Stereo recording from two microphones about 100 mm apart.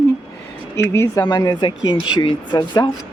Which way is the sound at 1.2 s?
40° left (ahead or behind).